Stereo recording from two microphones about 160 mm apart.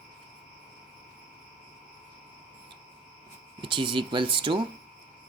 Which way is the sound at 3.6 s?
30° right (ahead or behind).